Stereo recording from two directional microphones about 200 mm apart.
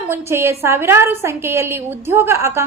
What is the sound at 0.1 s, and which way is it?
A woman's voice, 15° right (ahead or behind).